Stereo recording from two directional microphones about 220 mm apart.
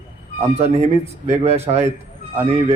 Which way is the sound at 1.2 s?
30° right (ahead or behind).